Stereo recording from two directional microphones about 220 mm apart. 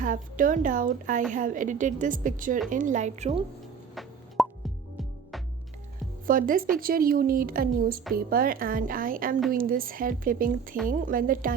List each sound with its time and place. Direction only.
0.0 s a woman's voice: 40° right (ahead or behind)
4.4 s music: centre (ahead or behind)
6.2 s a woman's voice: 40° right (ahead or behind)